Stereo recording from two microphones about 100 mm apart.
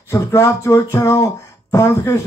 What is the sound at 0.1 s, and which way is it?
Speech, 30° left (ahead or behind).